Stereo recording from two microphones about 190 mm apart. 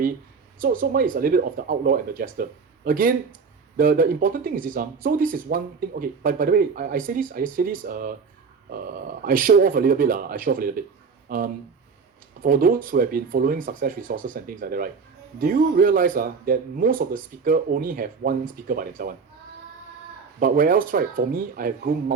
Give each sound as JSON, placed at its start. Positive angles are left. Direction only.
{"t": 0.6, "sound": "speech", "side_deg": -45}
{"t": 9.2, "sound": "speech", "side_deg": -45}
{"t": 20.4, "sound": "speech", "side_deg": -45}